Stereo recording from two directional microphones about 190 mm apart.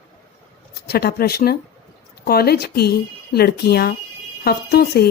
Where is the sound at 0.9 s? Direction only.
55° left (ahead or behind).